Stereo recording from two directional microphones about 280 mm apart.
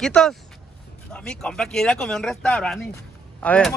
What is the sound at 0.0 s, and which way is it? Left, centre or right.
Speech, centre.